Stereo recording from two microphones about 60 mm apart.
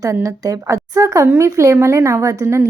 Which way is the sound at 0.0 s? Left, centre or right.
Right.